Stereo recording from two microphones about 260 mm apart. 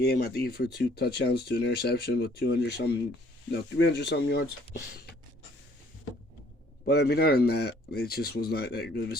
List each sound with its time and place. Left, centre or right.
0.0 s speech: left
6.8 s speech: left